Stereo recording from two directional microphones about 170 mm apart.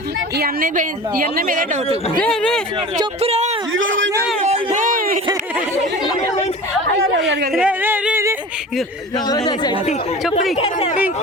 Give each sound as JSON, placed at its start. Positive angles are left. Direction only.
{"t": 0.3, "sound": "a woman's voice", "side_deg": -60}
{"t": 2.1, "sound": "speech", "side_deg": 5}
{"t": 3.2, "sound": "speech", "side_deg": -40}
{"t": 3.8, "sound": "a sound", "side_deg": -90}
{"t": 4.4, "sound": "a sound", "side_deg": -40}
{"t": 7.5, "sound": "speech", "side_deg": -5}
{"t": 9.1, "sound": "speech", "side_deg": 25}
{"t": 10.6, "sound": "speech", "side_deg": 40}